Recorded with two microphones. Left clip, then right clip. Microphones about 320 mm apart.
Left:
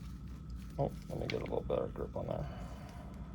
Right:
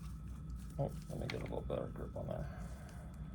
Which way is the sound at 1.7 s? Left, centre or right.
Centre.